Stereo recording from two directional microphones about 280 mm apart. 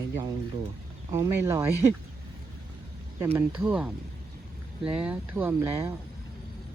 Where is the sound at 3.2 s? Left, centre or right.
Centre.